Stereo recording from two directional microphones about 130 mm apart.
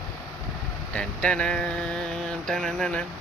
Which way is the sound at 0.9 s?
10° left (ahead or behind).